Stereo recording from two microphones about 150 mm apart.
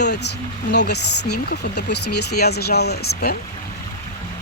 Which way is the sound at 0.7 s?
90° left.